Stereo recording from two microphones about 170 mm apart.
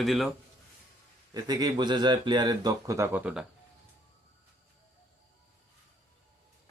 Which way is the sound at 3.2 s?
5° right (ahead or behind).